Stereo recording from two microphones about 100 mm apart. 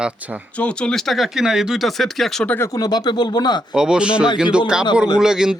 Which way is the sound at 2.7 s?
40° left (ahead or behind).